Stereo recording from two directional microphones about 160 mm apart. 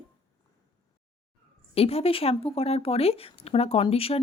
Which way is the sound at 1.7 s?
40° left (ahead or behind).